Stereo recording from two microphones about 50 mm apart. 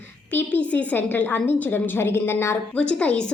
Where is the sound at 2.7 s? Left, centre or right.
Left.